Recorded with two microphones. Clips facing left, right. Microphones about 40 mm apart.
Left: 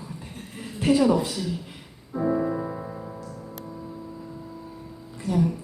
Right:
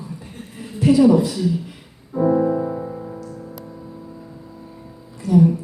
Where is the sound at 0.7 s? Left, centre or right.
Left.